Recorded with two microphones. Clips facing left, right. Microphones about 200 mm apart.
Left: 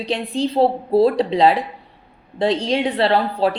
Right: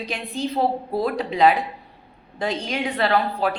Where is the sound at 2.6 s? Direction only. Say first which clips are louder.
Left 5 dB; 30° left (ahead or behind).